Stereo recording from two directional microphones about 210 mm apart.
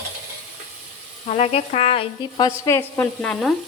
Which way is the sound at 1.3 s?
30° left (ahead or behind).